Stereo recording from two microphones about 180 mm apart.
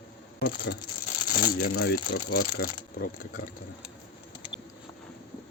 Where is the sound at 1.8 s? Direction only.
65° left (ahead or behind).